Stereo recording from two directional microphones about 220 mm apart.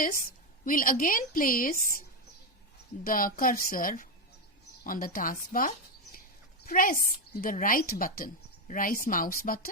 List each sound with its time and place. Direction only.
0.0 s a woman's voice: 40° left (ahead or behind)
3.0 s a woman's voice: 40° left (ahead or behind)